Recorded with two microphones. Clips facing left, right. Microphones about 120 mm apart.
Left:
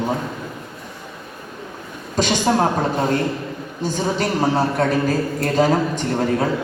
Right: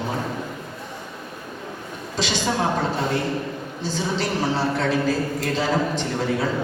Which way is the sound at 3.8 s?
50° left (ahead or behind).